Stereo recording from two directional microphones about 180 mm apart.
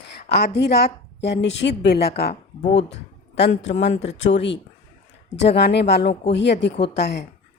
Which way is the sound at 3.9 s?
40° left (ahead or behind).